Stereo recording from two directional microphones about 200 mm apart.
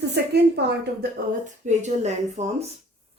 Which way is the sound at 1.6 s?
35° right (ahead or behind).